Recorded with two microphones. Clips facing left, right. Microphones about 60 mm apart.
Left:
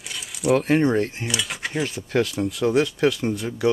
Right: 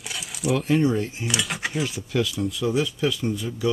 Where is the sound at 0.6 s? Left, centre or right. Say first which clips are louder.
Left 2 dB; left.